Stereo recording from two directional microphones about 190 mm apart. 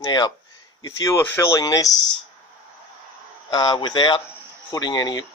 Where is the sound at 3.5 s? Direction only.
25° left (ahead or behind).